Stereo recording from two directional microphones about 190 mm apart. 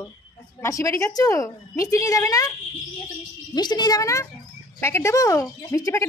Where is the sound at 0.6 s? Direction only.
15° left (ahead or behind).